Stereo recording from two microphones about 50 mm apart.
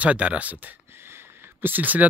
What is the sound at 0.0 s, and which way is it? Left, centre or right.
Speech, right.